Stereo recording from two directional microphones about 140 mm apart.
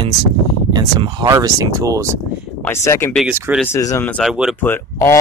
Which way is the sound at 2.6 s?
20° left (ahead or behind).